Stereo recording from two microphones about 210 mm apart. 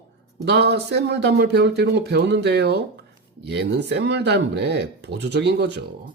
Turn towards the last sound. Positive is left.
turn(degrees=-55)  # may be behind; listen again after turning